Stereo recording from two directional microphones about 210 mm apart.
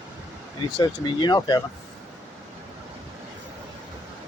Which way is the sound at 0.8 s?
20° left (ahead or behind).